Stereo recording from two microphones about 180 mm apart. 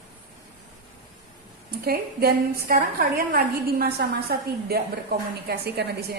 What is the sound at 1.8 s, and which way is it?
A woman's voice, 60° right (ahead or behind).